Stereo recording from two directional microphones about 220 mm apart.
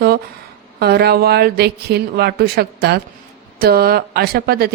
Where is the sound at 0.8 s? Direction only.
45° right (ahead or behind).